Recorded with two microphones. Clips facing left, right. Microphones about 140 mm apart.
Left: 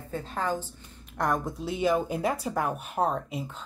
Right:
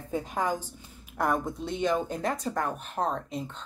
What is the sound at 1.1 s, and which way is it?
Speech, centre (ahead or behind).